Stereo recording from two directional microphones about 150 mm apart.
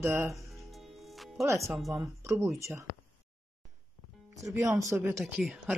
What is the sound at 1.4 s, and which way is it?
Speech, 20° right (ahead or behind).